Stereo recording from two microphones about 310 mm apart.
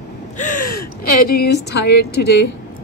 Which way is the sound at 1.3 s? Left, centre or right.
Left.